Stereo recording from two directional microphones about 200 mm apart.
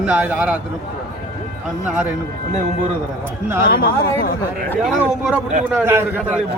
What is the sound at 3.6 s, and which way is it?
Speech, 50° left (ahead or behind).